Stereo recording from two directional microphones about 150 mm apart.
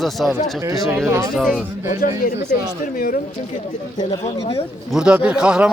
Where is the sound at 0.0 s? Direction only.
Centre (ahead or behind).